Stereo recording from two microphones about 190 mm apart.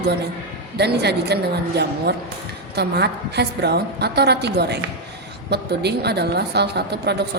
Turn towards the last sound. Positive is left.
turn(degrees=-60)  # may be behind; listen again after turning